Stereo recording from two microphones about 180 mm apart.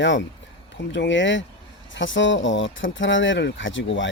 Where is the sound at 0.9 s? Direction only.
90° left.